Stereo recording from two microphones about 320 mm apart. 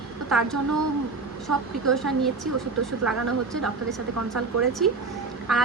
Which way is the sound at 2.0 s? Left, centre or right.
Centre.